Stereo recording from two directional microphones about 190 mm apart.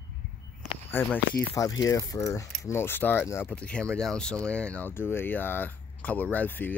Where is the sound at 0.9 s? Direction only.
10° left (ahead or behind).